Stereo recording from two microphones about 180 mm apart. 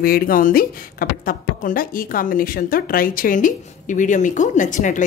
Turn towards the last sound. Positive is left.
turn(degrees=45)  # may be behind; listen again after turning